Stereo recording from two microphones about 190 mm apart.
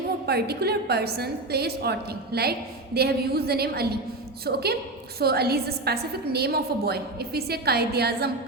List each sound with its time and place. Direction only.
0.3 s a woman's voice: 55° right (ahead or behind)